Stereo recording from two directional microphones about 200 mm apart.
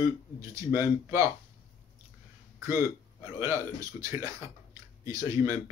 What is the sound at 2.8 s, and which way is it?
Speech, 15° right (ahead or behind).